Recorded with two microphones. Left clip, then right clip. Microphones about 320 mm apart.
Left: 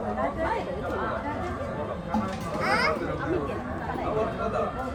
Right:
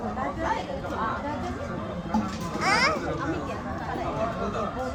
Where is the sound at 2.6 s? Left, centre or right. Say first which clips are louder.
Right 2 dB; right.